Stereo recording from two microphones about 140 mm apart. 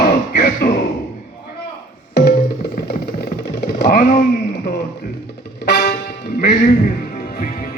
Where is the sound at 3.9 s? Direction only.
80° left.